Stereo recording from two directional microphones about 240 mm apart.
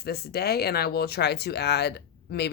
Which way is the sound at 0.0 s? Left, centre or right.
Left.